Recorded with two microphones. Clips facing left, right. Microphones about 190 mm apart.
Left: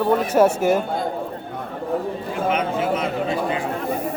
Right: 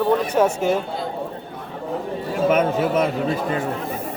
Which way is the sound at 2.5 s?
45° right (ahead or behind).